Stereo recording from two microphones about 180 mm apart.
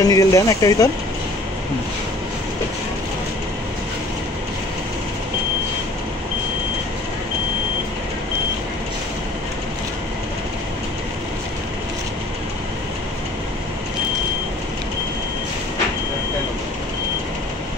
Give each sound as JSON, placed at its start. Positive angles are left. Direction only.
{"t": 0.0, "sound": "speech", "side_deg": 20}